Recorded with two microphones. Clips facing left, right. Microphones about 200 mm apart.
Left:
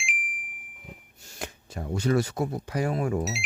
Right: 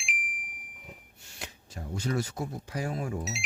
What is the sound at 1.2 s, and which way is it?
Speech, 50° left (ahead or behind).